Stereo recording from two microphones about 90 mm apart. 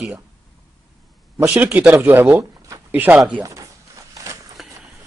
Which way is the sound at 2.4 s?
35° right (ahead or behind).